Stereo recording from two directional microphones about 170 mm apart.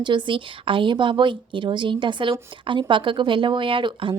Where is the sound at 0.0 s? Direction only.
25° right (ahead or behind).